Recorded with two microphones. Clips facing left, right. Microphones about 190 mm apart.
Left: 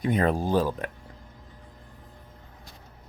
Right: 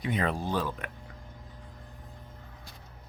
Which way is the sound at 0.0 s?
45° left (ahead or behind).